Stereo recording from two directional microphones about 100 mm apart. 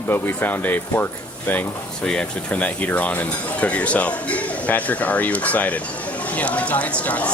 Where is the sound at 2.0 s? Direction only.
10° left (ahead or behind).